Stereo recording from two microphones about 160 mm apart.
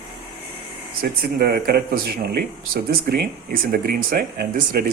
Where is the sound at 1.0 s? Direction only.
75° right (ahead or behind).